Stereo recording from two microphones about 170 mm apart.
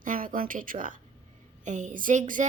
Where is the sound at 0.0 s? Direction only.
55° right (ahead or behind).